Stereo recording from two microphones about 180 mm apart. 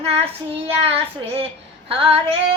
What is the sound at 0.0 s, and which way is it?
Child singing, 35° right (ahead or behind).